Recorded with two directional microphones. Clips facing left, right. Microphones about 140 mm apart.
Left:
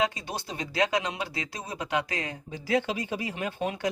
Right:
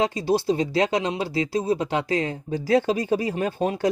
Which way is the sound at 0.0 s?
30° right (ahead or behind).